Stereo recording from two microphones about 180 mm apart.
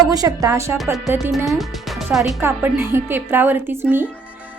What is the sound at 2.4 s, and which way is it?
Speech, 15° right (ahead or behind).